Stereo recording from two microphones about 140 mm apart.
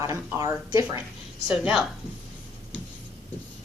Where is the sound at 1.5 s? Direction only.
5° right (ahead or behind).